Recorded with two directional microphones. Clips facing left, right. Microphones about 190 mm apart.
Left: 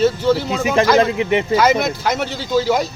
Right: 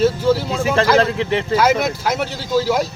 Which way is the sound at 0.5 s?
15° left (ahead or behind).